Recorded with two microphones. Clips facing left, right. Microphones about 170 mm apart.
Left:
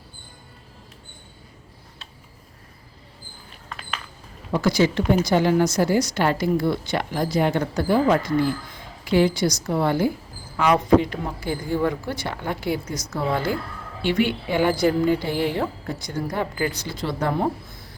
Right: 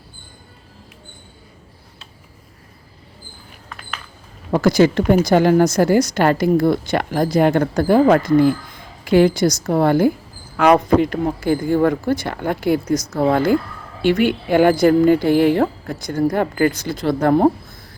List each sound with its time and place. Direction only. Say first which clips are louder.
4.5 s a woman's voice: right 6 dB; 45° right (ahead or behind)
10.6 s a woman's voice: right 4 dB; 55° right (ahead or behind)